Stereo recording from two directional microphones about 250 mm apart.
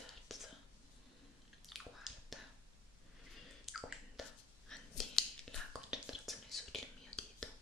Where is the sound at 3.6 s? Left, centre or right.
Centre.